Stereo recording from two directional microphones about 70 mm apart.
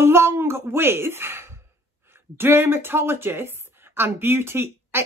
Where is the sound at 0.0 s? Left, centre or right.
Right.